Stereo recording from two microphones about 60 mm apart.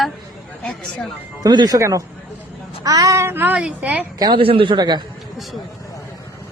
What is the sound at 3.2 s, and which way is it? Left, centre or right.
Speech, right.